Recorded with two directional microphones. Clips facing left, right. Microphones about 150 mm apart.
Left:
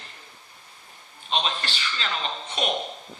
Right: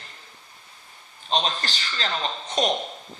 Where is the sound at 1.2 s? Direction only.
40° right (ahead or behind).